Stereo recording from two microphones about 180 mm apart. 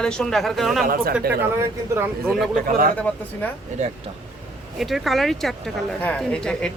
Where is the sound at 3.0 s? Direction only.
10° left (ahead or behind).